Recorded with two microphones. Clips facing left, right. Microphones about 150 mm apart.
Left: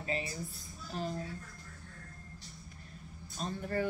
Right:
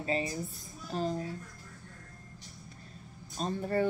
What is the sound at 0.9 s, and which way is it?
Speech, 35° right (ahead or behind).